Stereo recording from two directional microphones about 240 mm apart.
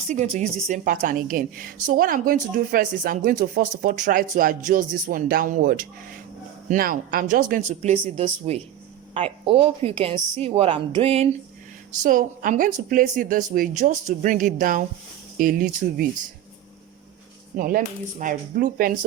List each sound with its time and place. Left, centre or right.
0.1 s a woman's voice: right
17.6 s a woman's voice: right